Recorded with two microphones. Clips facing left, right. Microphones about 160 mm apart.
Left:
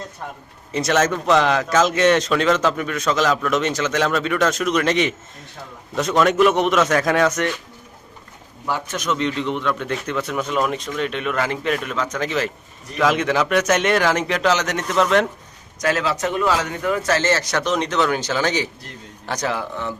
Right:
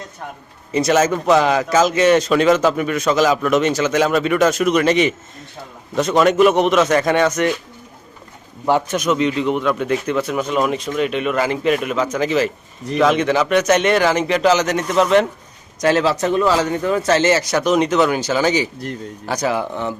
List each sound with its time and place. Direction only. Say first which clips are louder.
0.7 s speech: right 3 dB; 5° right (ahead or behind)
8.6 s speech: right 8 dB; 25° right (ahead or behind)
9.0 s speech: right 5 dB; 10° right (ahead or behind)
15.8 s a man's voice: right 5 dB; 30° right (ahead or behind)
17.3 s a man's voice: right 5 dB; 10° right (ahead or behind)